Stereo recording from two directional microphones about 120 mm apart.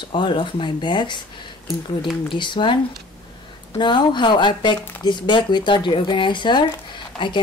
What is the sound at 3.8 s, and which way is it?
Speech, 40° left (ahead or behind).